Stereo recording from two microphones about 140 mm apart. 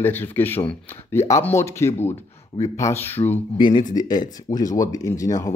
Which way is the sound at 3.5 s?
35° left (ahead or behind).